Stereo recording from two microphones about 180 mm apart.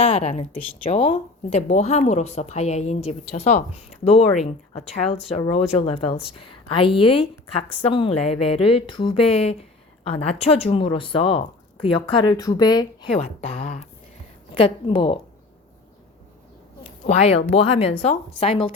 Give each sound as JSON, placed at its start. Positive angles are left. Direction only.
{"t": 0.0, "sound": "a woman's voice", "side_deg": 35}
{"t": 13.1, "sound": "a woman's voice", "side_deg": 35}
{"t": 16.8, "sound": "a woman's voice", "side_deg": 35}